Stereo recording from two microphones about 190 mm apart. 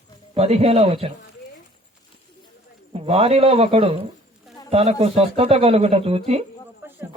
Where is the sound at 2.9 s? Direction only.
30° right (ahead or behind).